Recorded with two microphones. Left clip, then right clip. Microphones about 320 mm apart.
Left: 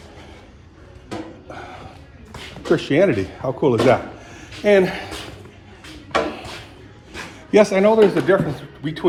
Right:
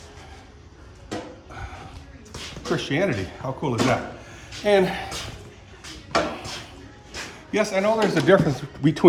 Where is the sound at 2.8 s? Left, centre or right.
Centre.